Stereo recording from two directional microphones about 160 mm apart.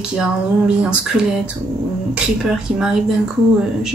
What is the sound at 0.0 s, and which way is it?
Speech, 5° right (ahead or behind).